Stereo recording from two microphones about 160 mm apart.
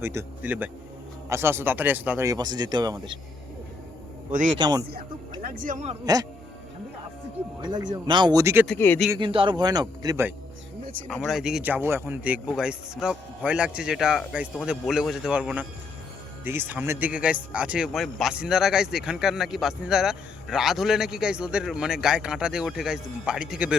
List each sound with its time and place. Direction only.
0.0 s speech: 15° right (ahead or behind)
4.3 s a man's voice: 55° right (ahead or behind)
4.5 s speech: 30° right (ahead or behind)
5.4 s a man's voice: 60° right (ahead or behind); by 6.0 s 45° right (ahead or behind)
7.6 s speech: 25° right (ahead or behind)
8.6 s speech: 10° left (ahead or behind)
9.1 s speech: 30° right (ahead or behind)
11.1 s speech: 5° right (ahead or behind)